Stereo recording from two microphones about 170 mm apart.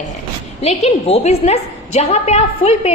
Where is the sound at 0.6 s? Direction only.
40° left (ahead or behind).